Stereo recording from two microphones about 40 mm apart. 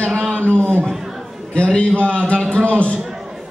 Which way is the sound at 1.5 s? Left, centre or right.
Left.